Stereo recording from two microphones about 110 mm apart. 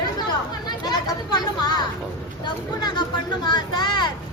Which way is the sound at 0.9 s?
40° left (ahead or behind).